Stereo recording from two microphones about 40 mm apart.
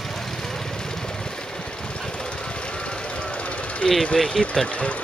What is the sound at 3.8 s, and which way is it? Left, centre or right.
Speech, centre.